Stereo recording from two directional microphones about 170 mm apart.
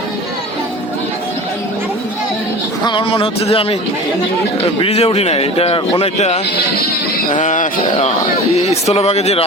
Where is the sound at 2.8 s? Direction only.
30° left (ahead or behind).